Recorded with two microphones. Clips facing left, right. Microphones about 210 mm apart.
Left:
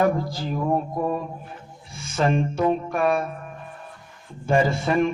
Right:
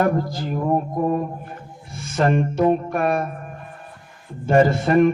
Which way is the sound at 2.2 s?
60° right (ahead or behind).